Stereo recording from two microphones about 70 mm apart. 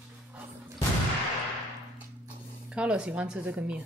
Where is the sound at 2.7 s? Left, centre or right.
Centre.